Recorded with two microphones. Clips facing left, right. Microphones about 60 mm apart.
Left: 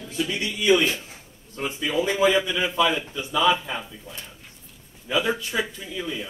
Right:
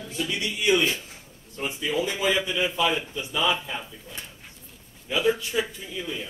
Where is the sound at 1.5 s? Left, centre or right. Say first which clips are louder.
Left 1 dB; left.